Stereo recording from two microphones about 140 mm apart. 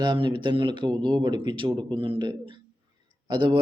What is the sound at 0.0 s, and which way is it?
A man's voice, 30° right (ahead or behind).